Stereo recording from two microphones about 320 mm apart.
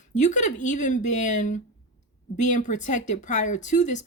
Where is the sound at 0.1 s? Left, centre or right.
Left.